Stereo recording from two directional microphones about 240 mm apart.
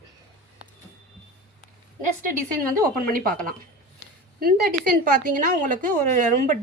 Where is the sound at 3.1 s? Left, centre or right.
Right.